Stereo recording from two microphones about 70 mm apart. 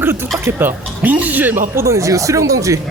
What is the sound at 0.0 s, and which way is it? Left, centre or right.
Speech, right.